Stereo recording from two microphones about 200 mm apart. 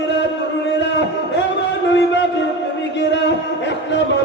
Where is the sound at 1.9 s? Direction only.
60° left (ahead or behind).